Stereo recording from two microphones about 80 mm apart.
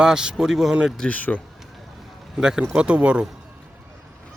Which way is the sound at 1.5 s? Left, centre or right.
Centre.